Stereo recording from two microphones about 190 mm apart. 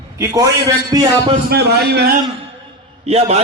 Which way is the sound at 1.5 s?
55° right (ahead or behind).